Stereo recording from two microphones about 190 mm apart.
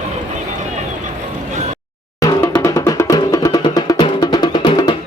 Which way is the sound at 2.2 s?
15° left (ahead or behind).